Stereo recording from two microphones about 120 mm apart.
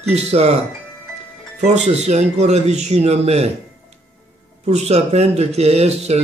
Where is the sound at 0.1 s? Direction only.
65° right (ahead or behind).